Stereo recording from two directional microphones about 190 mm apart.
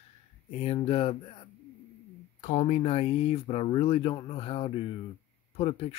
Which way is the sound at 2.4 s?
35° left (ahead or behind).